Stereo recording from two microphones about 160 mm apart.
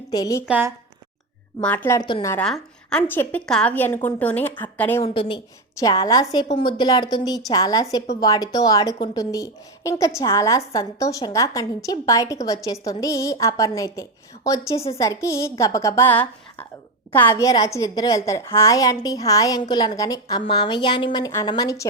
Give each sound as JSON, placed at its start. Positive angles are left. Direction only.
{"t": 0.1, "sound": "a woman's voice", "side_deg": 20}
{"t": 0.4, "sound": "a woman's voice", "side_deg": -10}
{"t": 1.6, "sound": "a woman's voice", "side_deg": 10}
{"t": 2.0, "sound": "a woman's voice", "side_deg": 30}
{"t": 2.4, "sound": "a woman's voice", "side_deg": 5}
{"t": 5.0, "sound": "a woman's voice", "side_deg": 35}